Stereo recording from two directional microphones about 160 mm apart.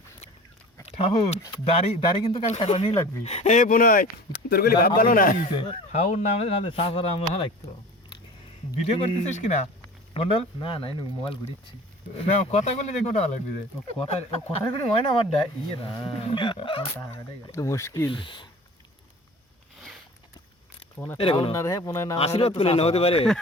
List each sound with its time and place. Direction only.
0.9 s speech: 35° left (ahead or behind); by 4.9 s 75° left (ahead or behind)
4.9 s speech: 65° left (ahead or behind)
5.9 s speech: 45° left (ahead or behind)
8.8 s speech: 40° left (ahead or behind)
10.2 s speech: 35° left (ahead or behind)
12.1 s speech: 40° left (ahead or behind)
16.3 s speech: 30° left (ahead or behind)
17.5 s speech: 20° left (ahead or behind)
18.1 s speech: 30° left (ahead or behind)
21.2 s speech: 35° left (ahead or behind)
21.5 s speech: 20° left (ahead or behind)
22.2 s speech: 40° left (ahead or behind)